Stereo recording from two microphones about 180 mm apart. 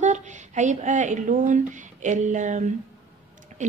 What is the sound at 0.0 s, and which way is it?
A woman's voice, 40° right (ahead or behind).